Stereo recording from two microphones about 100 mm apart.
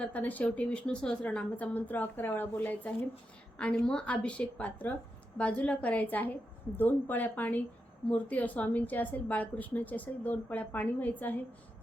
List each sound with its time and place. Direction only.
0.0 s a woman's voice: 15° left (ahead or behind)